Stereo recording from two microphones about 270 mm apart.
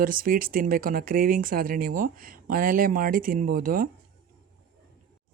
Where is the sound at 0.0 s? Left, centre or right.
Right.